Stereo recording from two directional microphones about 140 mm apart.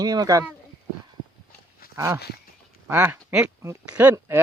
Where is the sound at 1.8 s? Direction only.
90° left.